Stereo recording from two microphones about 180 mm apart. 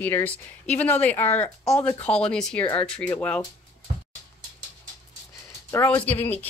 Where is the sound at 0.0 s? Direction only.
10° left (ahead or behind).